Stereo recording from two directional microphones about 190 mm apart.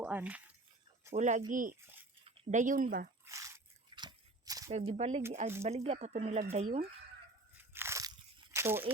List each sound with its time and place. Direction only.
0.0 s speech: 5° right (ahead or behind)
1.1 s speech: 40° right (ahead or behind)
3.2 s crunch: 15° right (ahead or behind)
4.9 s speech: 35° right (ahead or behind)
7.7 s biting: 15° right (ahead or behind)
8.5 s a sound: 10° right (ahead or behind)